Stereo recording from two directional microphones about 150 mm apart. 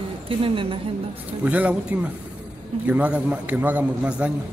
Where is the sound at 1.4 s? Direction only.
10° right (ahead or behind).